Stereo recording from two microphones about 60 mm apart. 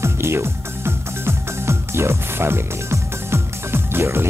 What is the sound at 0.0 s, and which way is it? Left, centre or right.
Music, right.